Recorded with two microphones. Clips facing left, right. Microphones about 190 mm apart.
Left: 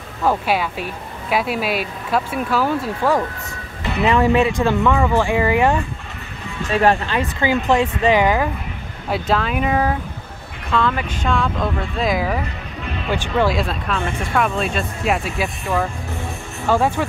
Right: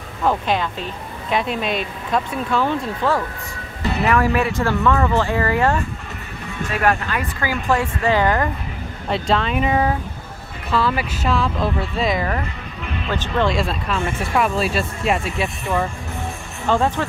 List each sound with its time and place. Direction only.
0.2 s speech: 5° left (ahead or behind)
4.0 s speech: 20° left (ahead or behind)
6.7 s speech: 30° left (ahead or behind); by 17.0 s 10° left (ahead or behind)